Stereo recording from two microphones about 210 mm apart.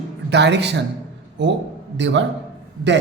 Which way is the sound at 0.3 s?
55° right (ahead or behind).